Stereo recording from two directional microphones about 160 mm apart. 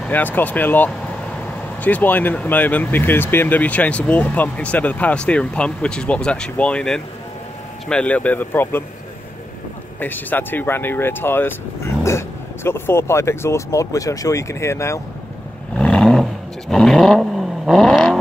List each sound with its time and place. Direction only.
0.0 s speech: 10° left (ahead or behind)
9.9 s speech: 10° left (ahead or behind)
15.7 s vehicle: 5° left (ahead or behind)